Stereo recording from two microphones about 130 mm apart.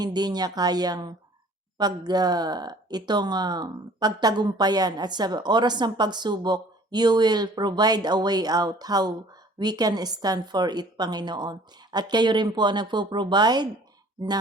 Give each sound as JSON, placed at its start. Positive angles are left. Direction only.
{"t": 0.0, "sound": "speech", "side_deg": -30}